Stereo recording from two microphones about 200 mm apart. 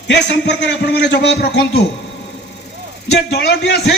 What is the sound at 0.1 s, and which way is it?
A man's voice, 60° left (ahead or behind).